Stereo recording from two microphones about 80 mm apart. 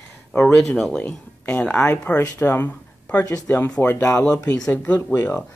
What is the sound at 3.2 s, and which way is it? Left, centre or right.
Speech, left.